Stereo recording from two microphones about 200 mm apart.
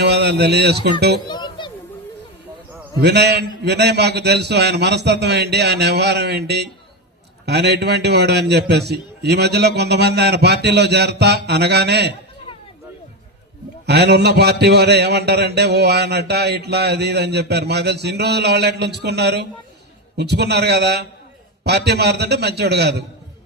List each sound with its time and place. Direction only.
0.0 s speech: 55° right (ahead or behind)
1.3 s children playing: 20° left (ahead or behind)
3.0 s a man's voice: 55° right (ahead or behind)
13.8 s a man's voice: 55° right (ahead or behind)